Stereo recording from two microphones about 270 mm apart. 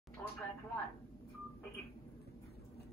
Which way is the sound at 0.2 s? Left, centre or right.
Centre.